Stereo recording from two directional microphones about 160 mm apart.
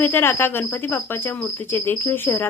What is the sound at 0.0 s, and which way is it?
Speech, 15° left (ahead or behind).